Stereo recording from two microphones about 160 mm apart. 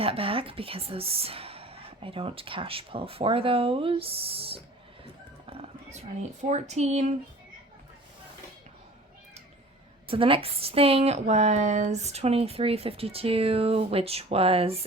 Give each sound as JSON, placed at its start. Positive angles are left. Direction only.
{"t": 0.0, "sound": "a woman's voice", "side_deg": -35}
{"t": 5.5, "sound": "music", "side_deg": -35}
{"t": 6.5, "sound": "speech", "side_deg": -45}
{"t": 10.1, "sound": "a woman's voice", "side_deg": -35}